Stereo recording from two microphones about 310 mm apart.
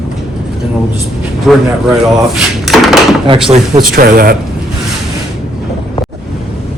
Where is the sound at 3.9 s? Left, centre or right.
Right.